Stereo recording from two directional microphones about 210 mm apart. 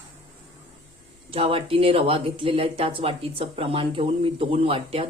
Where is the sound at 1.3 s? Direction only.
25° right (ahead or behind).